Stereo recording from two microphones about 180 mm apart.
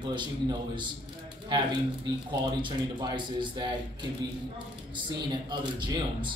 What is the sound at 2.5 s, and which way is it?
A man's voice, 25° right (ahead or behind).